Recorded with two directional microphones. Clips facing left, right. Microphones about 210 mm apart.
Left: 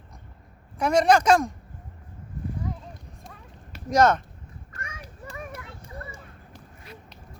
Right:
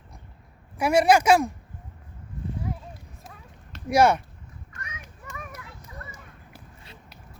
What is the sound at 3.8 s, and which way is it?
Speech, 10° right (ahead or behind).